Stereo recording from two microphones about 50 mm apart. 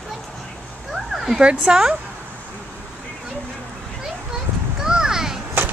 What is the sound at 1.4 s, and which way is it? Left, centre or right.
Speech, right.